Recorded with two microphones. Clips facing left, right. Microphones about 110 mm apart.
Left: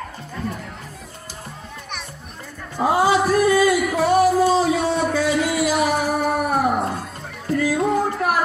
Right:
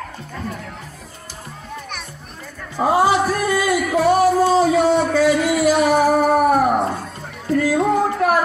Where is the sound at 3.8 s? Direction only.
Centre (ahead or behind).